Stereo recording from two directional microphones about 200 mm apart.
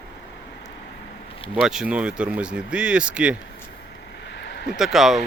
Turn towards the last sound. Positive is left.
turn(degrees=0)  # may be behind; listen again after turning